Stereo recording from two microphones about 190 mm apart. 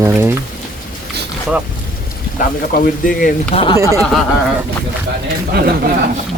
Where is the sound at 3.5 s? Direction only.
30° left (ahead or behind).